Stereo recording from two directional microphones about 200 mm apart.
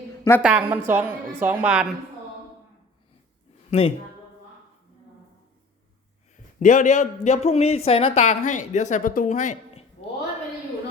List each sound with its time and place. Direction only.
0.4 s a woman's voice: 10° right (ahead or behind)
3.7 s a man's voice: 30° left (ahead or behind)
6.3 s a man's voice: 40° left (ahead or behind)